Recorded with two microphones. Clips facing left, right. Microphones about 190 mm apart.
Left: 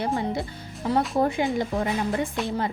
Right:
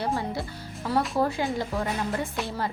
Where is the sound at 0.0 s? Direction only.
20° left (ahead or behind).